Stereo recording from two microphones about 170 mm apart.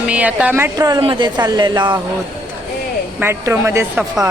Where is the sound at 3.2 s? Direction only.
15° right (ahead or behind).